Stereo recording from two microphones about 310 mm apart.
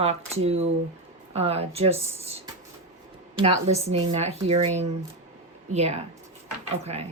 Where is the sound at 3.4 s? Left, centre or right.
Centre.